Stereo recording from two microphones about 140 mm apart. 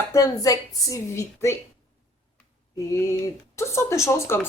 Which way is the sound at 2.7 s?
20° left (ahead or behind).